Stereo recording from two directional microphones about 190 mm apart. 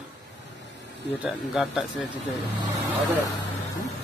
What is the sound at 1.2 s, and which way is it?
Speech, centre (ahead or behind).